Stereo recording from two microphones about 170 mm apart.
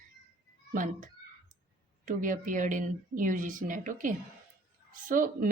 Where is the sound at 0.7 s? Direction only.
50° right (ahead or behind).